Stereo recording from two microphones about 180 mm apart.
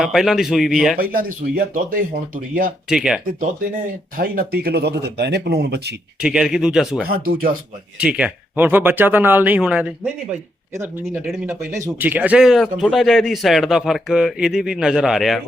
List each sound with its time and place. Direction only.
0.0 s a man's voice: centre (ahead or behind)
0.9 s speech: 55° right (ahead or behind)
2.9 s a man's voice: 5° right (ahead or behind)
3.8 s speech: 55° right (ahead or behind)
6.1 s a man's voice: 5° right (ahead or behind)
7.1 s speech: 55° right (ahead or behind)
7.9 s a man's voice: 5° right (ahead or behind)